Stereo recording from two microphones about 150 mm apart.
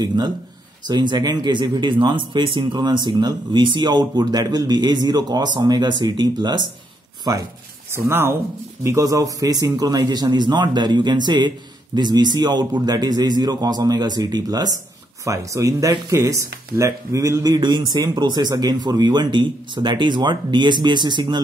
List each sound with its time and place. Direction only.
0.0 s a man's voice: 30° right (ahead or behind)